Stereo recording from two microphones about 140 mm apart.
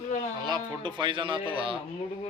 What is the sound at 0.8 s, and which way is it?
Speech, 35° right (ahead or behind).